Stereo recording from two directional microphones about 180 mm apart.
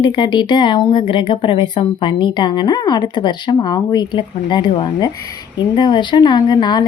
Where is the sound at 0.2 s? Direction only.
25° left (ahead or behind).